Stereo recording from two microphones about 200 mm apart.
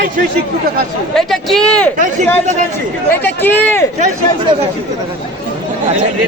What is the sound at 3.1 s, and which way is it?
Speech, 10° left (ahead or behind).